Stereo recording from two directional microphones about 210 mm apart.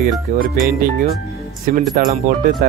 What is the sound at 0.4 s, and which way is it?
Speech, 45° right (ahead or behind).